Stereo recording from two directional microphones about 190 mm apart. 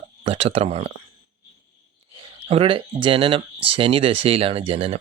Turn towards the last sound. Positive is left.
turn(degrees=-30)  # may be behind; listen again after turning